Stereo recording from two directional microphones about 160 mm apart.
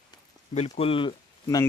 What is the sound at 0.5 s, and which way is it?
Speech, 40° left (ahead or behind).